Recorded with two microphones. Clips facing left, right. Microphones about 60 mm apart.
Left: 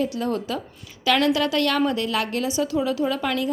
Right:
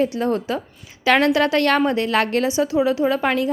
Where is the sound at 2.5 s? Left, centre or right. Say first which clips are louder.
Right 4 dB; right.